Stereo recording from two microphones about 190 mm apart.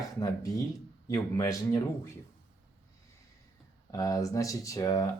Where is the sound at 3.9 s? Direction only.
20° left (ahead or behind).